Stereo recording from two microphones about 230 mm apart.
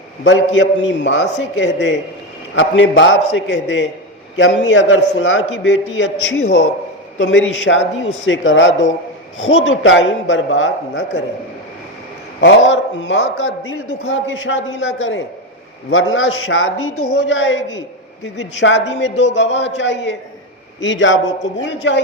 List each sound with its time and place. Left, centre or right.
0.3 s a man's voice: left
7.2 s a man's voice: left
12.4 s a man's voice: left